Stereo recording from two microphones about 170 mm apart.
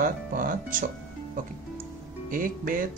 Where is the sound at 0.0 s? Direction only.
55° right (ahead or behind).